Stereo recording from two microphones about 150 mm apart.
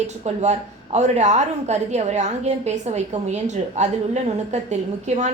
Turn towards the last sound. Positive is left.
turn(degrees=-50)  # may be behind; listen again after turning